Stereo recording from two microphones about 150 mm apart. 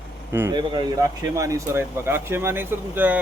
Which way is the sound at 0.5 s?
30° right (ahead or behind).